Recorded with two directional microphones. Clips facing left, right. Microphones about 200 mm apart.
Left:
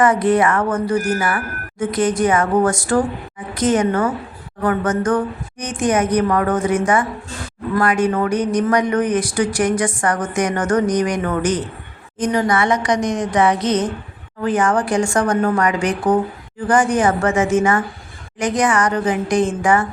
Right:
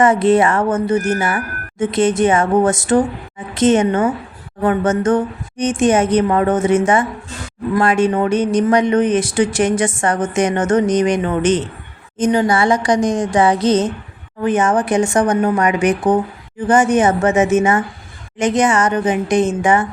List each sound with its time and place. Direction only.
0.0 s speech: 25° right (ahead or behind)